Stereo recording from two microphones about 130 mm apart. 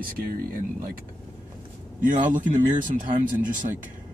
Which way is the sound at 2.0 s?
85° right.